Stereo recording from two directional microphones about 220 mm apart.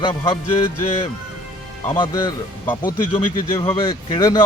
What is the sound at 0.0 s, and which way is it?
Speech, 20° left (ahead or behind).